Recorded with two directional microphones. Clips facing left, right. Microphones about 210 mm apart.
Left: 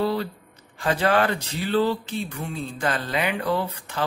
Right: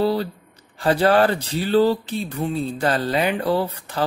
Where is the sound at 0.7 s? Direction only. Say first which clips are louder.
Right 5 dB; 35° right (ahead or behind).